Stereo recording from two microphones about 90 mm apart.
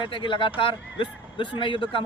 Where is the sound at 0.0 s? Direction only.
70° left (ahead or behind).